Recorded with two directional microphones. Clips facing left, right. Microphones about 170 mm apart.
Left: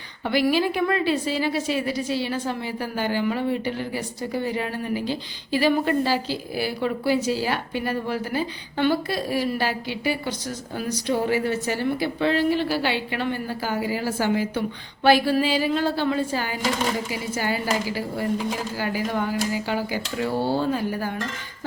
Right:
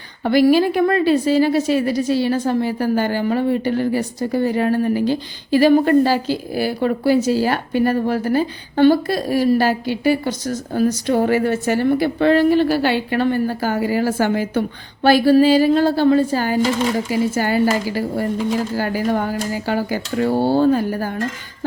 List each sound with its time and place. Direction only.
0.3 s a woman's voice: 45° right (ahead or behind)
15.0 s a woman's voice: 40° right (ahead or behind)